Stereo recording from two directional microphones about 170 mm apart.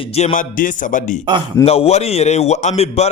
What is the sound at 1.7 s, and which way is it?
Speech, 35° left (ahead or behind).